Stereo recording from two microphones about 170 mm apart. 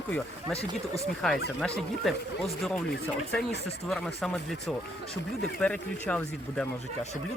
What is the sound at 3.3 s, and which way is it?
Speech, 5° left (ahead or behind).